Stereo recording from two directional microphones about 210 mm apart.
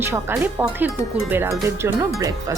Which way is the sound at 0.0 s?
10° right (ahead or behind).